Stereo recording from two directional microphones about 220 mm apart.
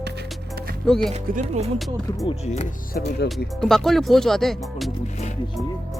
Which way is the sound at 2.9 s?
50° left (ahead or behind).